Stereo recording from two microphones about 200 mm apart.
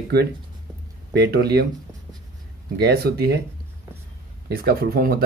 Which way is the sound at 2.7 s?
55° right (ahead or behind).